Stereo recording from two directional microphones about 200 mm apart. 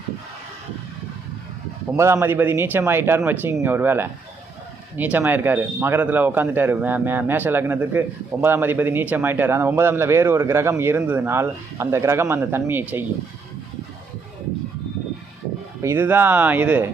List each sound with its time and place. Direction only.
2.0 s a man's voice: 15° right (ahead or behind)
15.8 s a man's voice: 10° right (ahead or behind)